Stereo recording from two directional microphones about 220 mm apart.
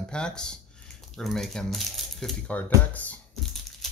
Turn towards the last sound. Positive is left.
turn(degrees=5)  # may be behind; listen again after turning